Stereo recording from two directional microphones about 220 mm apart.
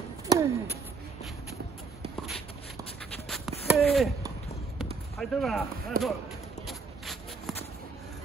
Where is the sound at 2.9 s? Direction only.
Centre (ahead or behind).